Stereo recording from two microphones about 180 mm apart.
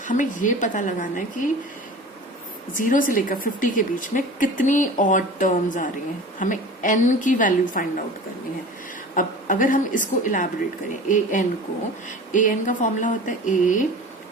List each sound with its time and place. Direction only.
0.0 s a woman's voice: 45° left (ahead or behind)
2.7 s a woman's voice: 50° left (ahead or behind)
9.1 s a woman's voice: 50° left (ahead or behind)